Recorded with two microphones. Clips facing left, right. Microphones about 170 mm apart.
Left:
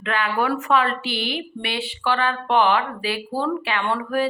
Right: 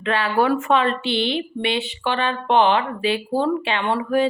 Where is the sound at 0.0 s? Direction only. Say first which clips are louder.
Right 3 dB; 30° right (ahead or behind).